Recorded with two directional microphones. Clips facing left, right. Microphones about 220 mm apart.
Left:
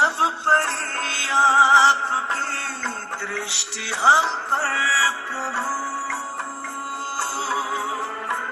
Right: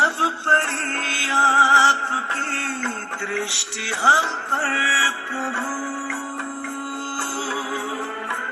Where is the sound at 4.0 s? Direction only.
30° right (ahead or behind).